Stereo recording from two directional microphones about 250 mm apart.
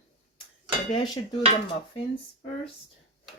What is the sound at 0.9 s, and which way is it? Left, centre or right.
Speech, centre.